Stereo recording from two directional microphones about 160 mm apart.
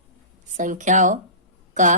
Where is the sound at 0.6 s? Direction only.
50° right (ahead or behind).